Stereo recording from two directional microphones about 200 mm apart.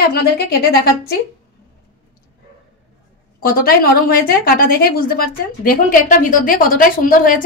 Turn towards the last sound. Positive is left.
turn(degrees=45)  # may be behind; listen again after turning